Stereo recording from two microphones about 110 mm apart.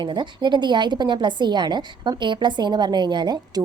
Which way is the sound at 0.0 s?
45° right (ahead or behind).